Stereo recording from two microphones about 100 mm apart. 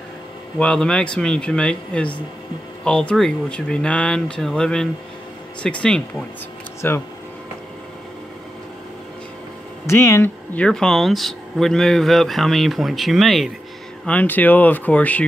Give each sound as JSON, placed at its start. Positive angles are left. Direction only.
{"t": 0.6, "sound": "speech", "side_deg": 10}
{"t": 9.8, "sound": "speech", "side_deg": 30}
{"t": 10.5, "sound": "speech", "side_deg": 10}
{"t": 14.0, "sound": "speech", "side_deg": 15}